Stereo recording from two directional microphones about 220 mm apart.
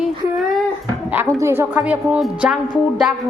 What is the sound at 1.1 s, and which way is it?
A woman's voice, 10° right (ahead or behind).